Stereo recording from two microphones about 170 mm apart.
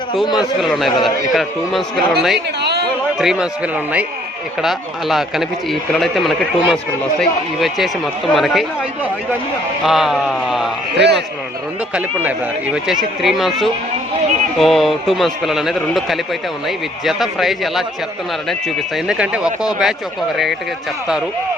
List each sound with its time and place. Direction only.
0.3 s a man's voice: centre (ahead or behind)
2.6 s chatter: 75° right (ahead or behind)
3.2 s a man's voice: 5° right (ahead or behind)
4.6 s a man's voice: centre (ahead or behind)
9.8 s a man's voice: centre (ahead or behind)
10.9 s a man's voice: 80° right
13.2 s a man's voice: centre (ahead or behind)
19.0 s a man's voice: 5° right (ahead or behind)